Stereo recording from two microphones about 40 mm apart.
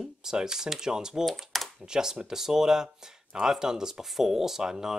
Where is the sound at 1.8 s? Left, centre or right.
Centre.